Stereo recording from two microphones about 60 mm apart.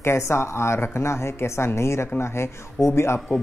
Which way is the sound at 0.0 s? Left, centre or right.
Left.